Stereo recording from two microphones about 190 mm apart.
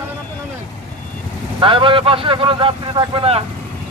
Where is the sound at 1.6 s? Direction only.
25° right (ahead or behind).